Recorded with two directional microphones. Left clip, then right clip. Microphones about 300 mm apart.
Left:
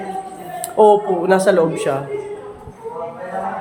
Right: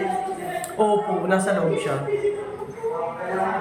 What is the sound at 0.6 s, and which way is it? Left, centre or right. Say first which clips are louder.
Speech: left 9 dB; centre.